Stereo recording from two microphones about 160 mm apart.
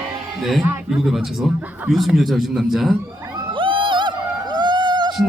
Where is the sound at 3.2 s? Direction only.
15° right (ahead or behind).